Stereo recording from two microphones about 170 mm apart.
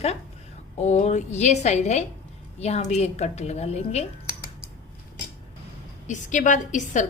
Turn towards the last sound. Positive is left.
turn(degrees=45)  # may be behind; listen again after turning